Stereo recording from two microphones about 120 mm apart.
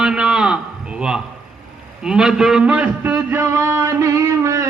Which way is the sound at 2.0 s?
5° right (ahead or behind).